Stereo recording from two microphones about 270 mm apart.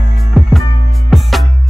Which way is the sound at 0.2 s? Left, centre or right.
Centre.